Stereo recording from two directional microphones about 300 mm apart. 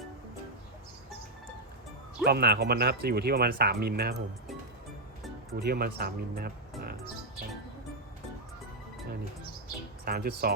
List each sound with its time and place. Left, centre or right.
2.2 s speech: right
5.5 s speech: right
10.1 s speech: right